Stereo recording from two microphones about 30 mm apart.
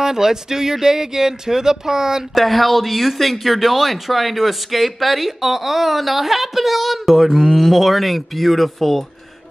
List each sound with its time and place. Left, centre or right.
0.0 s speech: centre
2.3 s speech: centre